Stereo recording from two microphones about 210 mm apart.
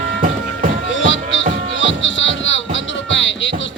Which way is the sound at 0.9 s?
65° left (ahead or behind).